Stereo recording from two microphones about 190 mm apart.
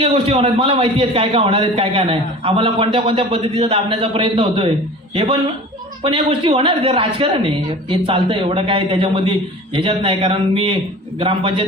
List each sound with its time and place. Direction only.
0.0 s speech: 30° right (ahead or behind)